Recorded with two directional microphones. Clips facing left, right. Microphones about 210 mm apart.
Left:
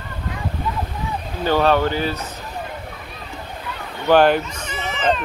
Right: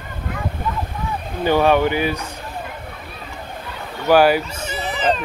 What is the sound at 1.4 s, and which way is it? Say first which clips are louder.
Speech: right 2 dB; 15° right (ahead or behind).